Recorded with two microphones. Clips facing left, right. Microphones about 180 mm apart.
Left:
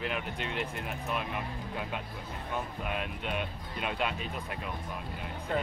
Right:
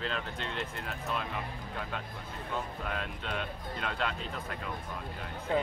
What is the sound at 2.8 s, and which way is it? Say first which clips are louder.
Speech: left 2 dB; 15° left (ahead or behind).